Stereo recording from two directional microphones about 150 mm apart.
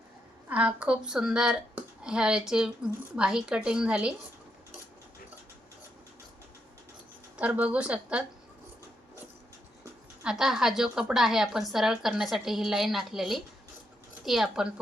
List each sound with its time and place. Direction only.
0.4 s a woman's voice: 10° right (ahead or behind)
7.3 s a woman's voice: 10° right (ahead or behind)
10.2 s a woman's voice: 5° right (ahead or behind)